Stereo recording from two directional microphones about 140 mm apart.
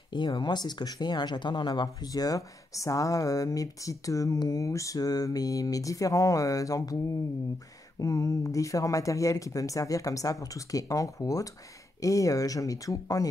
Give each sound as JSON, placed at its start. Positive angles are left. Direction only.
{"t": 0.1, "sound": "speech", "side_deg": 35}
{"t": 8.0, "sound": "speech", "side_deg": 20}